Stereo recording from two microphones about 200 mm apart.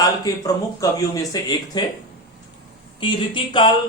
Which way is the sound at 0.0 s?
15° left (ahead or behind).